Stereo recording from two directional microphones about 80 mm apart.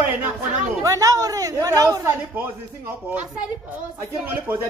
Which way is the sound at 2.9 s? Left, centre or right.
Right.